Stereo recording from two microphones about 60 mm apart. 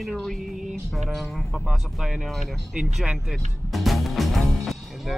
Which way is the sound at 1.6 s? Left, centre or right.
Centre.